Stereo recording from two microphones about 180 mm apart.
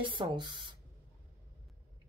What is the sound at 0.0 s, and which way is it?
Speech, 25° right (ahead or behind).